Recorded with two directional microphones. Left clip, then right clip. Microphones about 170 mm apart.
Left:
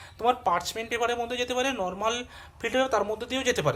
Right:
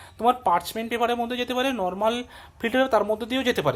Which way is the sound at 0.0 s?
50° right (ahead or behind).